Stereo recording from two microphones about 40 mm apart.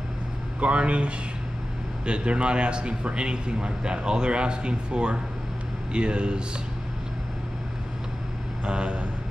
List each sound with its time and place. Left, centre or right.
0.6 s a man's voice: right
8.6 s a man's voice: right